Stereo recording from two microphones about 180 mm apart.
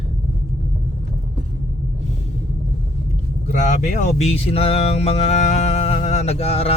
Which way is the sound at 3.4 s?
45° left (ahead or behind).